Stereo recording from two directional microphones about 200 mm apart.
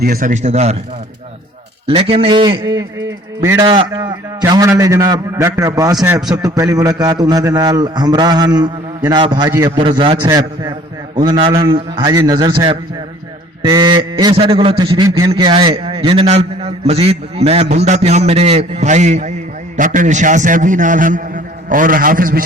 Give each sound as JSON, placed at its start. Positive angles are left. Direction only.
{"t": 0.0, "sound": "a man's voice", "side_deg": -45}
{"t": 1.9, "sound": "a man's voice", "side_deg": -25}